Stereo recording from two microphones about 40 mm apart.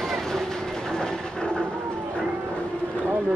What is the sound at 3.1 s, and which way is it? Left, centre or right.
Speech, right.